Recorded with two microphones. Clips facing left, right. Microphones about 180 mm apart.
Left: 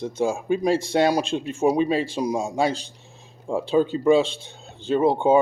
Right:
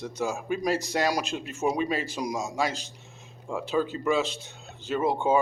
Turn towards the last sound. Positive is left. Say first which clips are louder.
# left 6 dB
turn(degrees=30)  # may be behind; listen again after turning